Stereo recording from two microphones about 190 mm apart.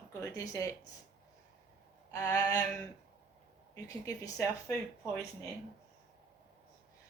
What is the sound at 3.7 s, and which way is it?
Speech, 20° left (ahead or behind).